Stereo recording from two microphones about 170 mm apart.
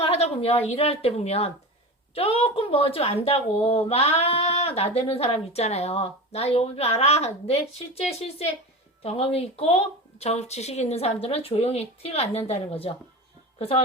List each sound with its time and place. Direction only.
0.0 s speech: 35° left (ahead or behind)